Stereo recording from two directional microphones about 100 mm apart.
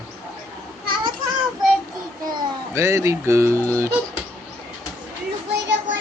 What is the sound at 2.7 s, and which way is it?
Speech, 30° right (ahead or behind).